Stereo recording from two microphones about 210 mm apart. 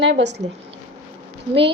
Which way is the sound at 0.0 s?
55° right (ahead or behind).